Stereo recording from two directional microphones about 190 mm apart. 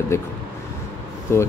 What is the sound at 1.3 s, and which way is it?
Speech, 15° left (ahead or behind).